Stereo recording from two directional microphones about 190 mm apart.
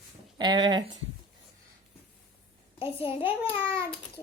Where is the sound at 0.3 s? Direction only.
25° right (ahead or behind).